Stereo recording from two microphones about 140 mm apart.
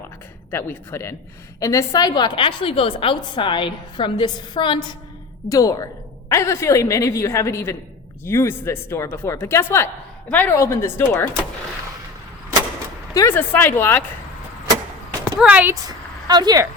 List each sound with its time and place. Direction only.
0.5 s a woman's voice: 15° left (ahead or behind)
13.1 s speech: 15° left (ahead or behind)
15.4 s speech: 10° right (ahead or behind)
15.7 s speech: 30° right (ahead or behind)